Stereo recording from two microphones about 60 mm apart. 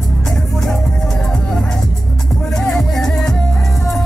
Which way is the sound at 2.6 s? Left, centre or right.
Centre.